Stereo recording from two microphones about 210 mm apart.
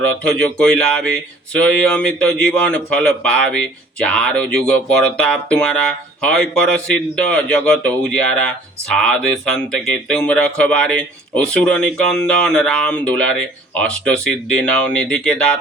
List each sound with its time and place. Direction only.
0.3 s speech: 5° left (ahead or behind)